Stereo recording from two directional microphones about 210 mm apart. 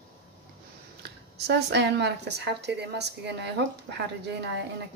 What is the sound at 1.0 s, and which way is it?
Speech, 55° right (ahead or behind).